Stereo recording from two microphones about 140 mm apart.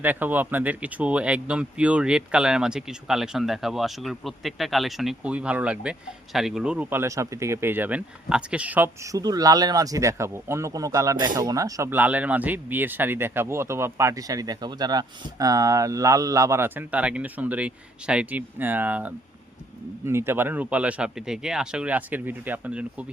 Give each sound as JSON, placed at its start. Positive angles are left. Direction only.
{"t": 0.0, "sound": "a man's voice", "side_deg": -10}